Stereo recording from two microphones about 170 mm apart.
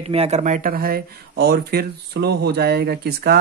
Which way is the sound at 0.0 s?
35° right (ahead or behind).